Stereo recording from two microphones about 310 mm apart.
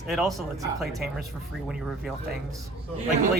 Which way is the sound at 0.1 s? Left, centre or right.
Centre.